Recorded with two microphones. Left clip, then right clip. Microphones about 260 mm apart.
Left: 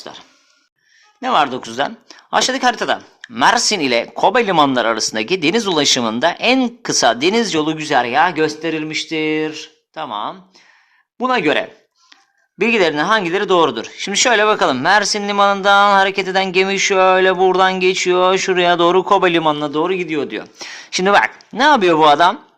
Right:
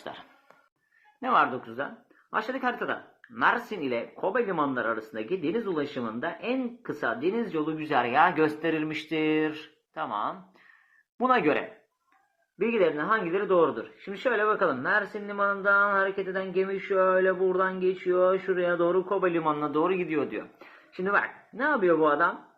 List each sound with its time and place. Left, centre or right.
1.2 s speech: left
12.5 s speech: left
19.6 s speech: left
20.9 s speech: left